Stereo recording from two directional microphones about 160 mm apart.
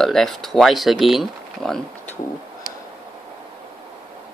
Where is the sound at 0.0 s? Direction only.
Centre (ahead or behind).